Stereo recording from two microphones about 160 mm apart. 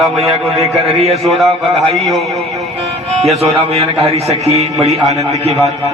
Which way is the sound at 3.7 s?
40° right (ahead or behind).